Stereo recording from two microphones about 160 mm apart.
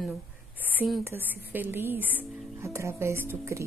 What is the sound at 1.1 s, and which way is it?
A woman's voice, 10° right (ahead or behind).